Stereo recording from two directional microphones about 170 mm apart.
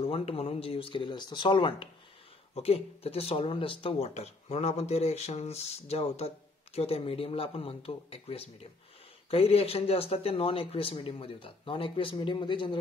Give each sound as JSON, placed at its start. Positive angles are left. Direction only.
{"t": 0.0, "sound": "speech", "side_deg": 35}